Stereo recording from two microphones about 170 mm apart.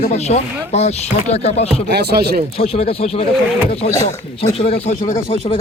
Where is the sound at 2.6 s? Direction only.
35° left (ahead or behind).